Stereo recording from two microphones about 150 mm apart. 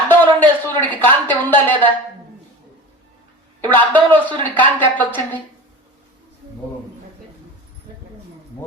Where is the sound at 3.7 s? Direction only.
10° left (ahead or behind).